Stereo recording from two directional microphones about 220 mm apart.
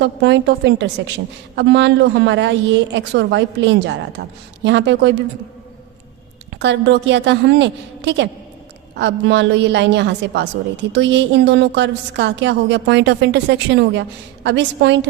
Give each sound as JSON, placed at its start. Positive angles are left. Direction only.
{"t": 0.0, "sound": "a woman's voice", "side_deg": -55}
{"t": 6.5, "sound": "a woman's voice", "side_deg": -55}